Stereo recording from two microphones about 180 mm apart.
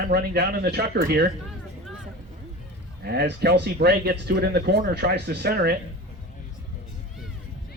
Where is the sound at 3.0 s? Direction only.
60° right (ahead or behind).